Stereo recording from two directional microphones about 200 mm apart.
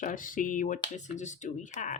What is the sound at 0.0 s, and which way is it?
Speech, 40° left (ahead or behind).